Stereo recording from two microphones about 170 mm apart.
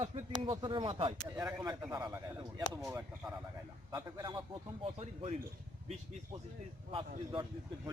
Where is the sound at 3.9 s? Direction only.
20° right (ahead or behind).